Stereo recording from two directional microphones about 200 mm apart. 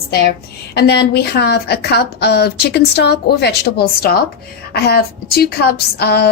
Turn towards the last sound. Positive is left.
turn(degrees=55)  # may be behind; listen again after turning